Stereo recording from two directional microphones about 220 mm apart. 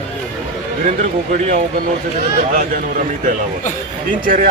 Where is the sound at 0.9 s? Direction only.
40° right (ahead or behind).